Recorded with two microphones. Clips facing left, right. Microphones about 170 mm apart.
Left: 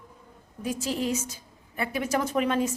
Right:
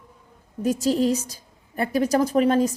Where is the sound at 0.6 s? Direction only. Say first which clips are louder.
Right 8 dB; 40° right (ahead or behind).